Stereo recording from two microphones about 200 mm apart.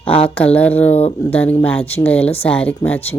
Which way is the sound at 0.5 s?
10° left (ahead or behind).